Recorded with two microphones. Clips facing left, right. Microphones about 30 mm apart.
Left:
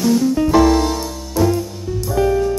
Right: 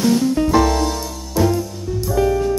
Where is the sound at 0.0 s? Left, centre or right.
Centre.